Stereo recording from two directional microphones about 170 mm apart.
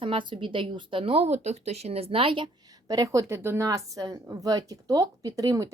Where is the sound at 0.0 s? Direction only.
30° right (ahead or behind).